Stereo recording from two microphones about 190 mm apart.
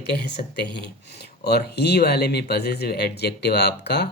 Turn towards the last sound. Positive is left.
turn(degrees=60)  # may be behind; listen again after turning